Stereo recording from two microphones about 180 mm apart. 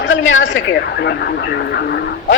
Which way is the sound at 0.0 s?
90° left.